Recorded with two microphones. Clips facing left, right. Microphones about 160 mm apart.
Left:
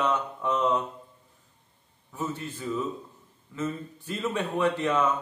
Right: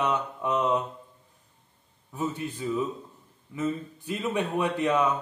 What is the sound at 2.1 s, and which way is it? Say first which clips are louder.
A man's voice: right 2 dB; 15° right (ahead or behind).